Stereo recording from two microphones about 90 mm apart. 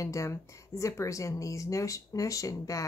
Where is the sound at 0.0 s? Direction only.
35° left (ahead or behind).